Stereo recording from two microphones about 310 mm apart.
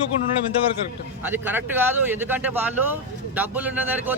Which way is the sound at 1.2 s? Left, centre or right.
Centre.